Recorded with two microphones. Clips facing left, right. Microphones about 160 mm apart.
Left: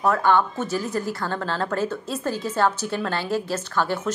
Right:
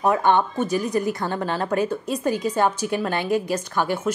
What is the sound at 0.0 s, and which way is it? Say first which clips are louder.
Speech: right 1 dB; 20° right (ahead or behind).